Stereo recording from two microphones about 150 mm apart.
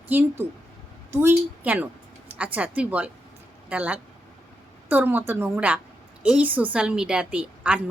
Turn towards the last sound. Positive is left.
turn(degrees=-10)  # may be behind; listen again after turning